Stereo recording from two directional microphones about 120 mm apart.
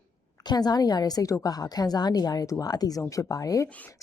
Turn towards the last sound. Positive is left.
turn(degrees=10)  # may be behind; listen again after turning